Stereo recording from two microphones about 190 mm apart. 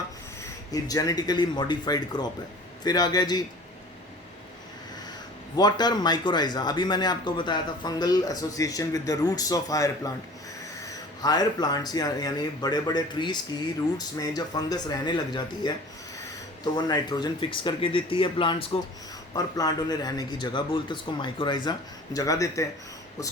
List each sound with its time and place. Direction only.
0.7 s speech: 20° left (ahead or behind)
5.5 s speech: 20° left (ahead or behind)
11.2 s speech: 20° left (ahead or behind)
16.7 s speech: 20° left (ahead or behind)